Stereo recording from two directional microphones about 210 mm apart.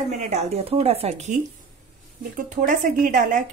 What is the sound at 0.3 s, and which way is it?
A woman's voice, 30° right (ahead or behind).